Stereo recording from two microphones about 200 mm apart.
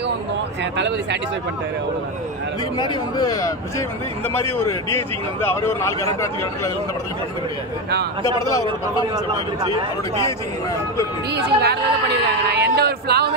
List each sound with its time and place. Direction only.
0.7 s speech: 60° right (ahead or behind)
2.8 s a man's voice: 20° left (ahead or behind)
8.6 s speech: 15° right (ahead or behind)
11.2 s speech: 55° right (ahead or behind)